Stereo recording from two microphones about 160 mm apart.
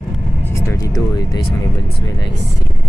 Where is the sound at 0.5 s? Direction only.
20° left (ahead or behind).